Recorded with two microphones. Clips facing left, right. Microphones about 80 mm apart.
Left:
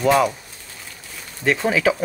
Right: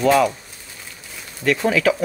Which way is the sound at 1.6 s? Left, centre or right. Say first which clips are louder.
Right 1 dB; left.